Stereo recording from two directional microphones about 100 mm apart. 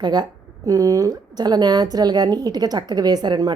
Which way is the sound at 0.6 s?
35° right (ahead or behind).